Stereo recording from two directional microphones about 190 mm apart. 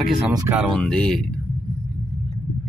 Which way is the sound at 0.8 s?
5° left (ahead or behind).